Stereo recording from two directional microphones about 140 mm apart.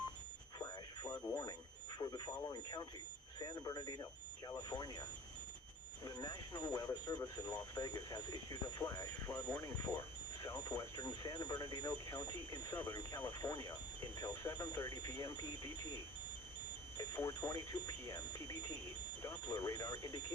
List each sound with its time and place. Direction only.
0.6 s alarm: 30° left (ahead or behind)
2.0 s speech: 30° left (ahead or behind)
6.1 s speech: 30° left (ahead or behind)
17.0 s speech: 25° left (ahead or behind)